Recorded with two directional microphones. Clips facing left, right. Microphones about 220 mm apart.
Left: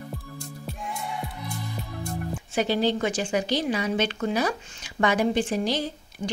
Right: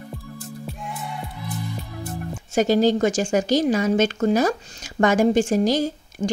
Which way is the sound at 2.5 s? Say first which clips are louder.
Right 6 dB; 45° right (ahead or behind).